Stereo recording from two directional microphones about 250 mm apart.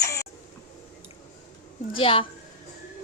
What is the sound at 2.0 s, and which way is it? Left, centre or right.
Speech, left.